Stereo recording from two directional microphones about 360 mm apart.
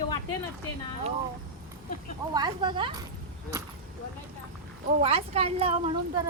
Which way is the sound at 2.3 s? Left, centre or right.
Centre.